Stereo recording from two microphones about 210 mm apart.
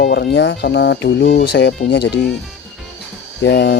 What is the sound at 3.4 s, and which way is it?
Speech, 55° left (ahead or behind).